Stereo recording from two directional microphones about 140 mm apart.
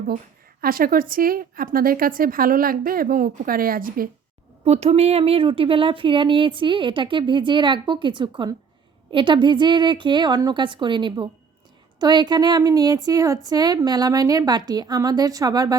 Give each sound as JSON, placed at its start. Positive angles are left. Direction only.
{"t": 0.6, "sound": "a woman's voice", "side_deg": -90}
{"t": 4.6, "sound": "a woman's voice", "side_deg": -50}